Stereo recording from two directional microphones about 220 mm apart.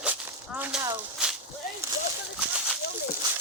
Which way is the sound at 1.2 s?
5° right (ahead or behind).